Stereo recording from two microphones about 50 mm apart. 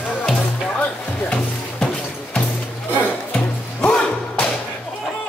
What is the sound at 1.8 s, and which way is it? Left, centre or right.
Music, centre.